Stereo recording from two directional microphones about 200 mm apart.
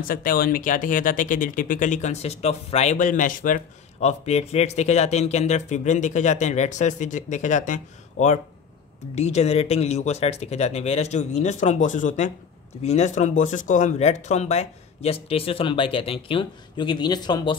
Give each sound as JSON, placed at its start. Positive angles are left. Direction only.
{"t": 0.1, "sound": "speech", "side_deg": 45}